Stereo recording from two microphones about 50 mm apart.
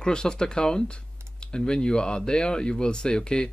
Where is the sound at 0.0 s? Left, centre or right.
Centre.